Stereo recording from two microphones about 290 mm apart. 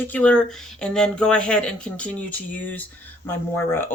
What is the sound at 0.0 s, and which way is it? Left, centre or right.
Speech, centre.